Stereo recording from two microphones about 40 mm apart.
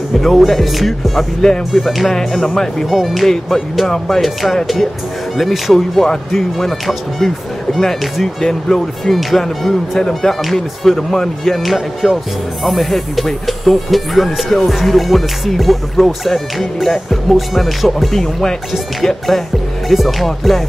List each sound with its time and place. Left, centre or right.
0.1 s speech: centre
1.4 s speech: centre
1.8 s speech: centre
2.1 s speech: centre
2.9 s speech: centre
11.6 s speech: centre
18.2 s speech: centre
18.7 s speech: centre